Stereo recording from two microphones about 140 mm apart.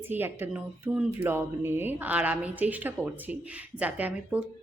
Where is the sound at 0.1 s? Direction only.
15° right (ahead or behind).